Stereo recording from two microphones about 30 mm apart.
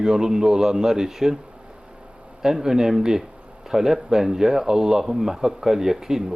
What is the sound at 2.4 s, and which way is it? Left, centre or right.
Speech, centre.